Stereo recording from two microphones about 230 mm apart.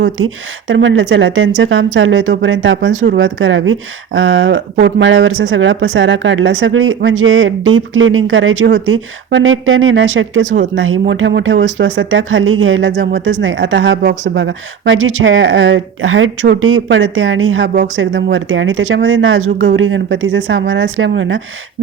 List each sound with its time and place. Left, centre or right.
0.7 s speech: right
2.9 s speech: right
3.2 s speech: right
10.4 s speech: right
10.8 s speech: right
11.1 s speech: right